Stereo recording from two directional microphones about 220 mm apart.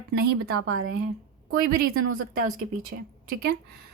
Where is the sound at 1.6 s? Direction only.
40° right (ahead or behind).